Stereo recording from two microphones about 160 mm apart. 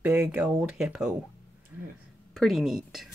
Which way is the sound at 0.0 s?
10° right (ahead or behind).